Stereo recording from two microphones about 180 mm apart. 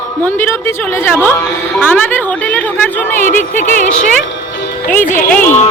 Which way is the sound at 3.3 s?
45° left (ahead or behind).